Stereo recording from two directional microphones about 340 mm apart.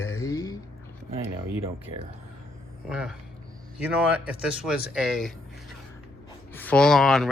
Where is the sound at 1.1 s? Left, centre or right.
Centre.